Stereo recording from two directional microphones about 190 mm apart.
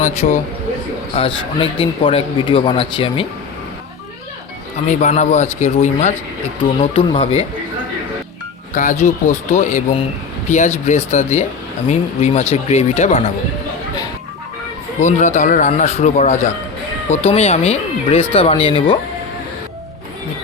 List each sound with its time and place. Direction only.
0.2 s speech: 40° left (ahead or behind)
1.1 s speech: 30° left (ahead or behind)
4.9 s speech: 35° left (ahead or behind)
8.7 s speech: 40° left (ahead or behind)
15.0 s speech: 40° left (ahead or behind)